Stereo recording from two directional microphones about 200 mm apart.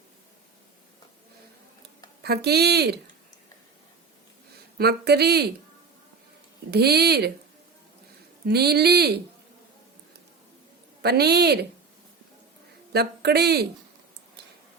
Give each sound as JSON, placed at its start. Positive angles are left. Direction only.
{"t": 2.2, "sound": "speech", "side_deg": -55}
{"t": 4.8, "sound": "speech", "side_deg": -55}
{"t": 6.7, "sound": "speech", "side_deg": -55}
{"t": 8.4, "sound": "speech", "side_deg": -50}
{"t": 11.0, "sound": "speech", "side_deg": -55}
{"t": 12.9, "sound": "speech", "side_deg": -55}